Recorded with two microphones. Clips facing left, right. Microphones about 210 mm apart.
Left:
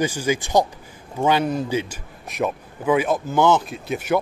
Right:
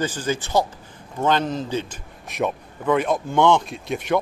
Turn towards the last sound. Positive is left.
turn(degrees=5)  # may be behind; listen again after turning